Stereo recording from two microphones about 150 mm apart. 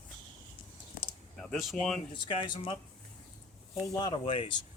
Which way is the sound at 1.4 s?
Centre (ahead or behind).